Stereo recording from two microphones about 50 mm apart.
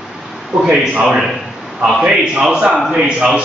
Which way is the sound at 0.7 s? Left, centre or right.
Right.